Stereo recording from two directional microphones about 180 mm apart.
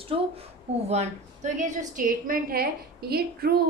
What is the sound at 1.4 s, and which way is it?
A woman's voice, 45° right (ahead or behind).